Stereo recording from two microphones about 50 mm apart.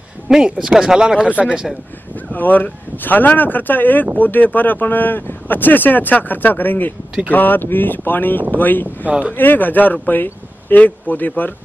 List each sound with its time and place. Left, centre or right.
0.3 s speech: centre
2.3 s speech: left